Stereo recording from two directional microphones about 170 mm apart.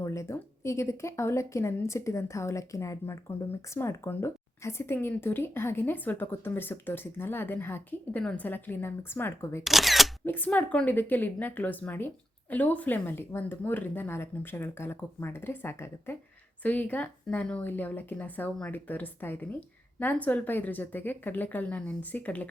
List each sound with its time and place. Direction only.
0.0 s speech: 15° left (ahead or behind)
9.6 s speech: centre (ahead or behind)
10.2 s speech: 10° left (ahead or behind)